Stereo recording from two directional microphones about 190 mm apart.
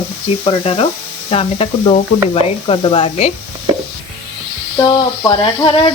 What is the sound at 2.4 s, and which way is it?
Sizzle, 30° left (ahead or behind).